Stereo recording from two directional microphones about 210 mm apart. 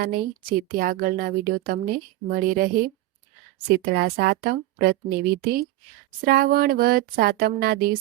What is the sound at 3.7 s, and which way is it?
Speech, 50° right (ahead or behind).